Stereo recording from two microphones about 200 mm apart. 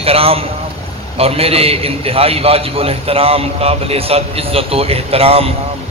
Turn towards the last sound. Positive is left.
turn(degrees=-30)  # may be behind; listen again after turning